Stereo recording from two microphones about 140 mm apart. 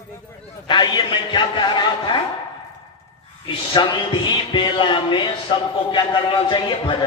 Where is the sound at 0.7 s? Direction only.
35° left (ahead or behind).